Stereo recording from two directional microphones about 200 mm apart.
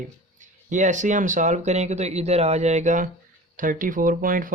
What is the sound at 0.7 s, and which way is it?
Speech, 40° right (ahead or behind).